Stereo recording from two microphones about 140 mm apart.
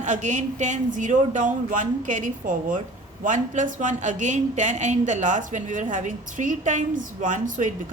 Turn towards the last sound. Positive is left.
turn(degrees=-65)  # may be behind; listen again after turning